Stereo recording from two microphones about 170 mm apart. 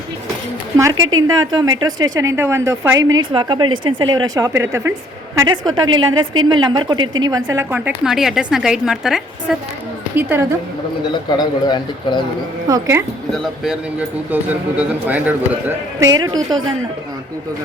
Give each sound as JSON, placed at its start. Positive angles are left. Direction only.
{"t": 0.8, "sound": "a woman's voice", "side_deg": -20}
{"t": 3.2, "sound": "a woman's voice", "side_deg": -25}
{"t": 10.2, "sound": "a woman's voice", "side_deg": -10}
{"t": 11.1, "sound": "a man's voice", "side_deg": 25}
{"t": 12.6, "sound": "a woman's voice", "side_deg": -20}
{"t": 13.3, "sound": "a woman's voice", "side_deg": 0}
{"t": 16.0, "sound": "a woman's voice", "side_deg": -20}